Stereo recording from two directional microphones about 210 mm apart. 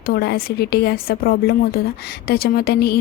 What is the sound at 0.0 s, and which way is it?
Speech, 50° left (ahead or behind).